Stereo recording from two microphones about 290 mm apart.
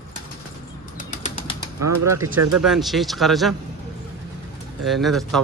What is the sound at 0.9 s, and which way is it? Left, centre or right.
Bird, left.